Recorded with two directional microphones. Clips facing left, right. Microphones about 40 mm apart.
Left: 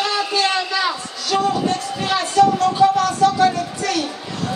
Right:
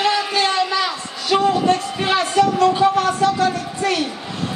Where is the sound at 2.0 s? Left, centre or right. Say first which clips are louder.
Left 5 dB; right.